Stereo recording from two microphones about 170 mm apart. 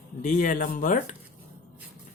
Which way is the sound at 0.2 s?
50° left (ahead or behind).